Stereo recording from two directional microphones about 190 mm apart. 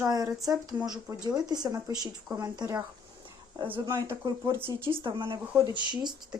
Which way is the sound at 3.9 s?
25° right (ahead or behind).